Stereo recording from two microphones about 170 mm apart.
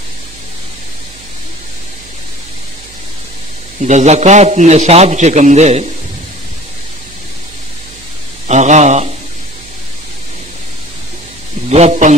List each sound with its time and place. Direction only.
3.8 s a man's voice: 40° right (ahead or behind)
8.5 s a sound: 45° right (ahead or behind)
11.7 s a man's voice: 40° right (ahead or behind)